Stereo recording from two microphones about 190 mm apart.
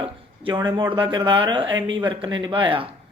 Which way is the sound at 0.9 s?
25° right (ahead or behind).